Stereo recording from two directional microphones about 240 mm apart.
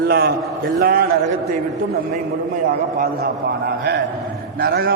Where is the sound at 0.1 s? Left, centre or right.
Right.